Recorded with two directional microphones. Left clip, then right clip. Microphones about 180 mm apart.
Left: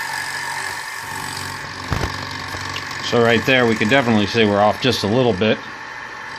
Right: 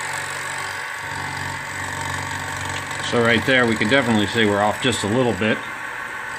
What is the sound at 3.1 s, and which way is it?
Speech, 30° left (ahead or behind).